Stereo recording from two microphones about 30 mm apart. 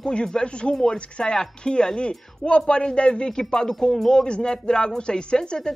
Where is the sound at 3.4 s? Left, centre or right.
Centre.